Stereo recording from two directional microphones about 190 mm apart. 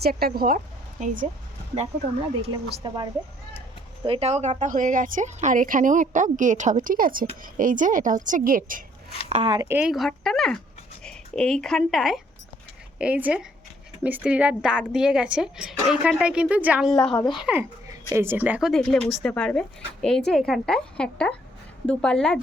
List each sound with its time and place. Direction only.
0.0 s speech: 55° right (ahead or behind)
2.8 s a woman's voice: 25° right (ahead or behind); by 8.8 s 45° right (ahead or behind)
9.3 s speech: 25° right (ahead or behind)
9.6 s a woman's voice: 5° right (ahead or behind)